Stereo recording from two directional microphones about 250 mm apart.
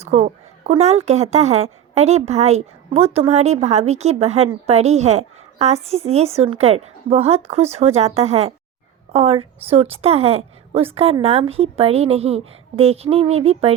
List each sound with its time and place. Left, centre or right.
0.0 s a woman's voice: right